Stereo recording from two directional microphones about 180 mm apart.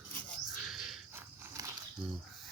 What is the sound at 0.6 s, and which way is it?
Wild animals, centre (ahead or behind).